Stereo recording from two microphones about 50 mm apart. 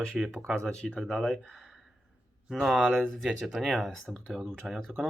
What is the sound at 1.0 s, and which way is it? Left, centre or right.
Speech, centre.